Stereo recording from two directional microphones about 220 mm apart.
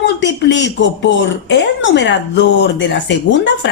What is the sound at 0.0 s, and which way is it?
A woman's voice, 50° left (ahead or behind).